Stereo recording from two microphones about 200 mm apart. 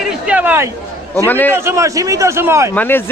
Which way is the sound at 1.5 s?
15° right (ahead or behind).